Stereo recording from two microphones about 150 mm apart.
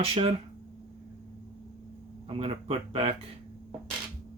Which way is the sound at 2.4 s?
40° right (ahead or behind).